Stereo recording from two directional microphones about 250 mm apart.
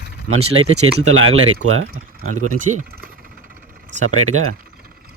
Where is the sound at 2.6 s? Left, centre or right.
Right.